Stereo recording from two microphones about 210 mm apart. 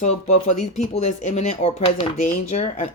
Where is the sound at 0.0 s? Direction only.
35° left (ahead or behind).